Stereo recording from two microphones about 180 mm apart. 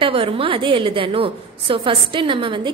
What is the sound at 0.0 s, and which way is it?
A woman's voice, 30° right (ahead or behind).